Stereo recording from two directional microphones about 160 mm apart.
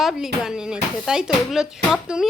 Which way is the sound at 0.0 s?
Centre (ahead or behind).